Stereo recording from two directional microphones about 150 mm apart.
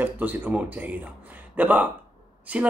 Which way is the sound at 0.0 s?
10° right (ahead or behind).